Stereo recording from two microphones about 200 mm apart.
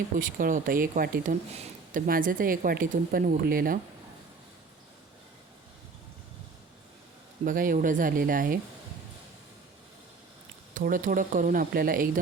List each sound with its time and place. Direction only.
0.2 s speech: 45° right (ahead or behind)
7.4 s speech: 45° right (ahead or behind)
10.8 s speech: 40° right (ahead or behind)